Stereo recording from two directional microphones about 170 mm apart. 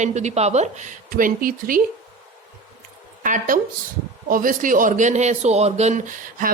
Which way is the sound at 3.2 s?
50° right (ahead or behind).